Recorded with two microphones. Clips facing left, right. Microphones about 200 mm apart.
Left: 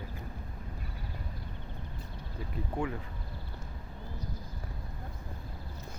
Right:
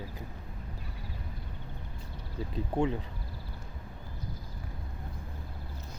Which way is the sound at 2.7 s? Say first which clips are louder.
Right 5 dB; 25° right (ahead or behind).